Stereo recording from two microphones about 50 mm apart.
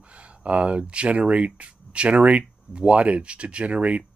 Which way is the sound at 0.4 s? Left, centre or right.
Right.